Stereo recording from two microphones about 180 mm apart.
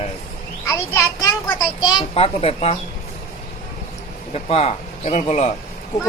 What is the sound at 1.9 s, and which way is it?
Speech, 30° left (ahead or behind).